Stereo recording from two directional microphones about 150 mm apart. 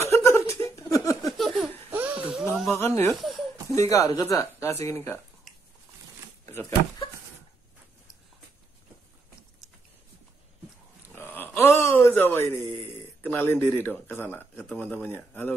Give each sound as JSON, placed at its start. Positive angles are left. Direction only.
{"t": 0.0, "sound": "laughter", "side_deg": 20}
{"t": 1.2, "sound": "a sound", "side_deg": 0}
{"t": 1.9, "sound": "laughter", "side_deg": -10}
{"t": 2.7, "sound": "speech", "side_deg": 15}
{"t": 3.1, "sound": "speech", "side_deg": 0}
{"t": 3.7, "sound": "speech", "side_deg": 20}
{"t": 6.4, "sound": "a sound", "side_deg": 15}
{"t": 11.1, "sound": "a sound", "side_deg": 15}
{"t": 13.2, "sound": "speech", "side_deg": 15}